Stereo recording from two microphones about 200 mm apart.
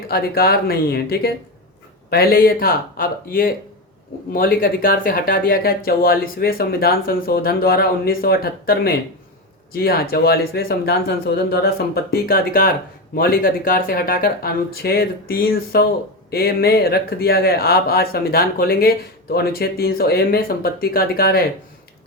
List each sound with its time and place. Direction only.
0.1 s speech: 50° left (ahead or behind)